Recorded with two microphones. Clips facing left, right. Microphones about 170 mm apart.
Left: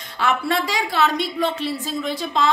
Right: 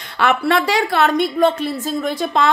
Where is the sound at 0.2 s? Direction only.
70° right (ahead or behind).